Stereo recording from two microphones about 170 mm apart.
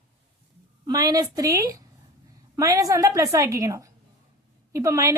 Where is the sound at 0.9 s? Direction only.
20° right (ahead or behind).